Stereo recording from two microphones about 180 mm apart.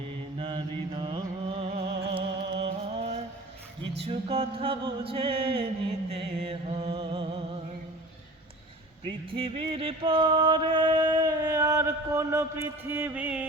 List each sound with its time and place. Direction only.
0.3 s music: 30° right (ahead or behind)
9.0 s music: 30° right (ahead or behind); by 13.5 s 10° right (ahead or behind)